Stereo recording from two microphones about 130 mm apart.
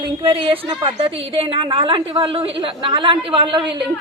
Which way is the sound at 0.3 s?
45° right (ahead or behind).